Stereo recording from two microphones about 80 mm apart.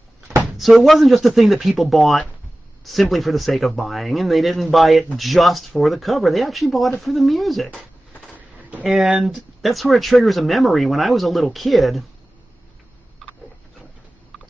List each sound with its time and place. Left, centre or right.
0.6 s speech: centre
8.4 s a sound: centre
8.8 s speech: centre